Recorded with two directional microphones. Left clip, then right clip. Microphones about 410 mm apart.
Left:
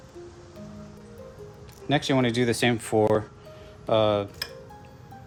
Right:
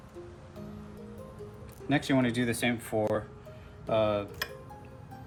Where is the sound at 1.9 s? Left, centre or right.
Left.